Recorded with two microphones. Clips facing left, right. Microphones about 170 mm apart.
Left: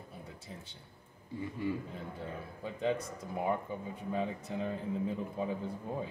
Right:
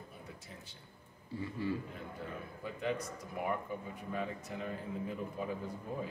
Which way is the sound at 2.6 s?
25° left (ahead or behind).